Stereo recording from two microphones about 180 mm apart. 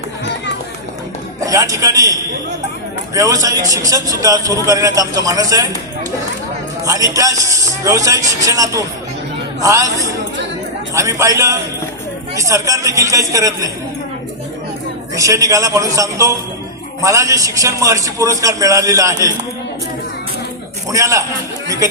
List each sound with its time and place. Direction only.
1.5 s a man's voice: 20° right (ahead or behind)
3.2 s a man's voice: 20° right (ahead or behind)
6.8 s a man's voice: 20° right (ahead or behind)
15.1 s a man's voice: 20° right (ahead or behind)
20.9 s a man's voice: 15° right (ahead or behind)